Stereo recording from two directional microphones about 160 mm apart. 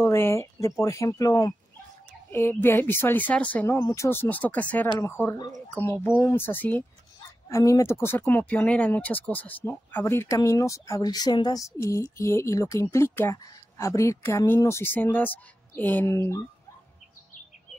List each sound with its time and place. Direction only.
0.0 s speech: 15° left (ahead or behind)